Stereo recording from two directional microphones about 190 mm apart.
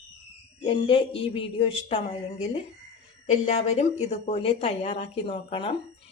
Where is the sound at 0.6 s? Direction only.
30° left (ahead or behind).